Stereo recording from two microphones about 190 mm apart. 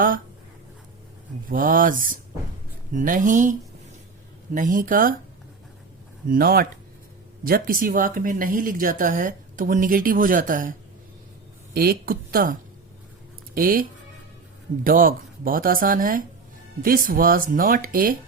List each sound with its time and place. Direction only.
1.5 s speech: 45° right (ahead or behind)
4.5 s speech: 45° right (ahead or behind)
6.2 s speech: 50° right (ahead or behind)
14.8 s speech: 50° right (ahead or behind)